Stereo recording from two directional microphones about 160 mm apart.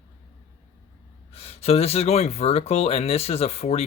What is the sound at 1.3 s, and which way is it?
Speech, 40° left (ahead or behind).